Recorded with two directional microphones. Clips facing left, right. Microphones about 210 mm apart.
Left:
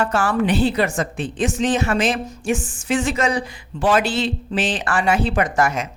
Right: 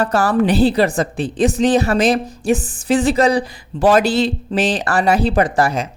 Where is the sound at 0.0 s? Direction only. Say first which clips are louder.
Right 4 dB; 35° right (ahead or behind).